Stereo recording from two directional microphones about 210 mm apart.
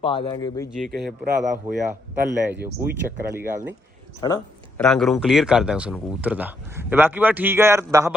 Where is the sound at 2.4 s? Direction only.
10° right (ahead or behind).